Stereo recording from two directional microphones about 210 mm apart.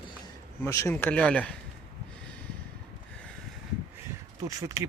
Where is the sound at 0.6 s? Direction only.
15° left (ahead or behind).